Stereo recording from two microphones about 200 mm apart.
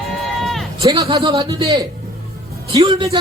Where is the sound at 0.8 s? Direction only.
20° right (ahead or behind).